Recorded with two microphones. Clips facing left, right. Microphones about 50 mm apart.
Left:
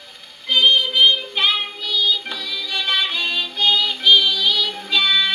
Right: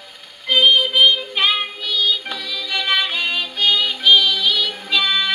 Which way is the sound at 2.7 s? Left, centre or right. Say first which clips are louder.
Right 2 dB; centre.